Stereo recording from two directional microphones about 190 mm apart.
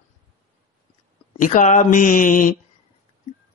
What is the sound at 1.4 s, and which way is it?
Speech, 40° left (ahead or behind).